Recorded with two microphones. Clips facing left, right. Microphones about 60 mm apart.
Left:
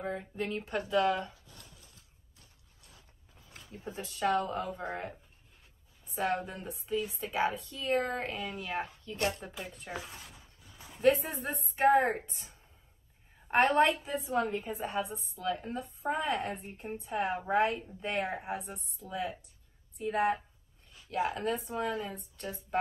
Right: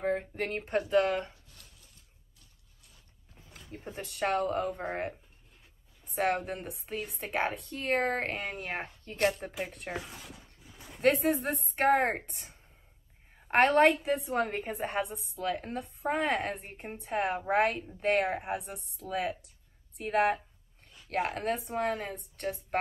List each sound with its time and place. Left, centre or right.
0.0 s speech: right
3.7 s a woman's voice: right
11.7 s a woman's voice: right
14.3 s a woman's voice: right
21.1 s a woman's voice: right